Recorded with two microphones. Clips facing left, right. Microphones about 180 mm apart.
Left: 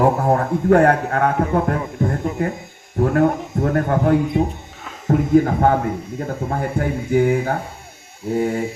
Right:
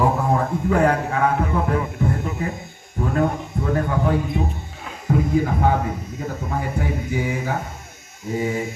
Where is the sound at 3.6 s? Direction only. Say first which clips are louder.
Left 4 dB; 55° left (ahead or behind).